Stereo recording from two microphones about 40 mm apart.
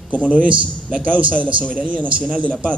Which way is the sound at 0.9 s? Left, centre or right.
Right.